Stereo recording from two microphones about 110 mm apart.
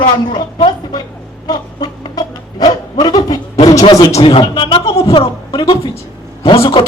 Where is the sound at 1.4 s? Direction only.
40° left (ahead or behind).